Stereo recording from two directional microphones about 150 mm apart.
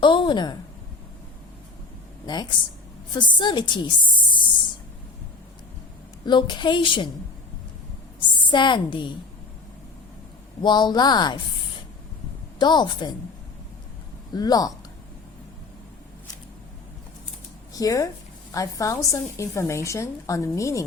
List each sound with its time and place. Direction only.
0.0 s a sound: 30° left (ahead or behind)
2.2 s a woman's voice: 30° left (ahead or behind)
6.2 s a woman's voice: 30° left (ahead or behind)
8.4 s a woman's voice: 30° left (ahead or behind)
10.6 s a woman's voice: 30° left (ahead or behind)
12.5 s a woman's voice: 30° left (ahead or behind)
14.3 s a woman's voice: 25° left (ahead or behind)
17.7 s a woman's voice: 25° left (ahead or behind)